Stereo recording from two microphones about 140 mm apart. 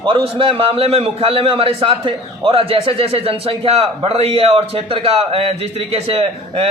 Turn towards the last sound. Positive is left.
turn(degrees=-40)  # may be behind; listen again after turning